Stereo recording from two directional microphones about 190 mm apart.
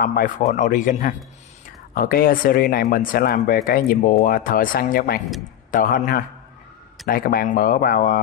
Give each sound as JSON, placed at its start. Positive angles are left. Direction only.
{"t": 0.0, "sound": "speech", "side_deg": 45}